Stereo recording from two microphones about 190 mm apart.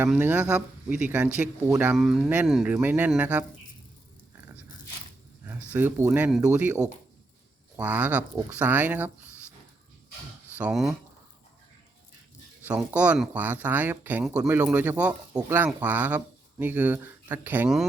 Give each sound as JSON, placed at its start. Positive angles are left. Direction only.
{"t": 0.0, "sound": "speech", "side_deg": -10}
{"t": 5.7, "sound": "speech", "side_deg": -10}
{"t": 7.8, "sound": "speech", "side_deg": -10}
{"t": 10.6, "sound": "speech", "side_deg": -5}
{"t": 12.6, "sound": "speech", "side_deg": -5}